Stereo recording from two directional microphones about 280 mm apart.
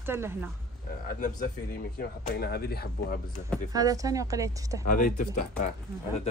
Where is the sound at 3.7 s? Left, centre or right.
Centre.